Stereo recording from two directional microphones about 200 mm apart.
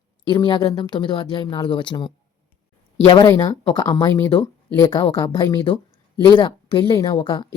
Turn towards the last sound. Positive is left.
turn(degrees=25)  # may be behind; listen again after turning